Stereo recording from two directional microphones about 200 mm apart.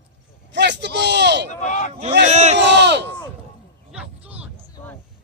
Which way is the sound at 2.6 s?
60° right (ahead or behind).